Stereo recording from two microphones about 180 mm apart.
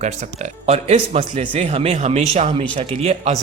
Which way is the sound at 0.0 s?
40° right (ahead or behind).